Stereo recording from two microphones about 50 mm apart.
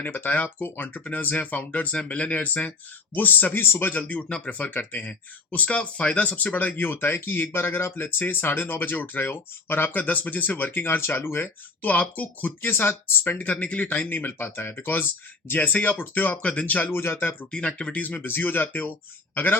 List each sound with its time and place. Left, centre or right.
0.0 s speech: left
3.9 s speech: left
12.7 s speech: left
13.4 s speech: left
16.9 s speech: left
17.5 s speech: centre
17.9 s speech: left